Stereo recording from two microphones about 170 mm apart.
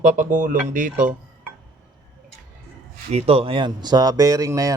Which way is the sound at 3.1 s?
35° right (ahead or behind).